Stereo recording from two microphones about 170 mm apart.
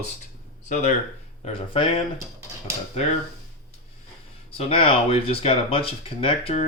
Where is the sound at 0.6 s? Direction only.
45° left (ahead or behind).